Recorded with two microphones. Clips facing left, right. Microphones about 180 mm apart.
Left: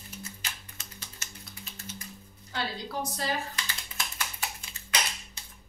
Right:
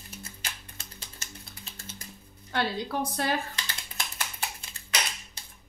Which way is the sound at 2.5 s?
60° right (ahead or behind).